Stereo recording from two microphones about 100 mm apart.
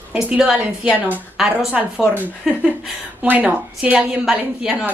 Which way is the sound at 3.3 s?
15° right (ahead or behind).